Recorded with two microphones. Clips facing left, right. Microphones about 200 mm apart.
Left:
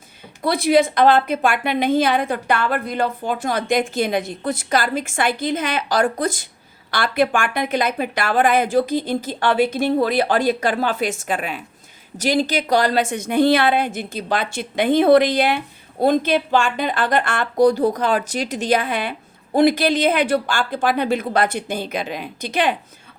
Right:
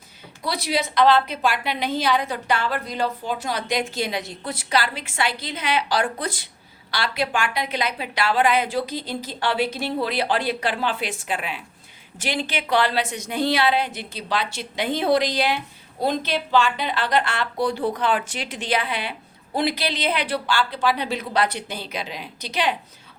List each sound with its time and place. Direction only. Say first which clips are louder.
0.4 s a woman's voice: left 9 dB; 55° left (ahead or behind)